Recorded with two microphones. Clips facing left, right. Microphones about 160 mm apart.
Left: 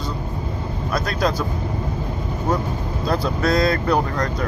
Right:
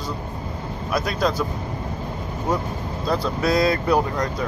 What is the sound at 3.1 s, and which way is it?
Speech, 10° right (ahead or behind).